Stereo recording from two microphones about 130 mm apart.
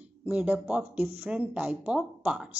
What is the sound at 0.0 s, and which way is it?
A woman's voice, 10° right (ahead or behind).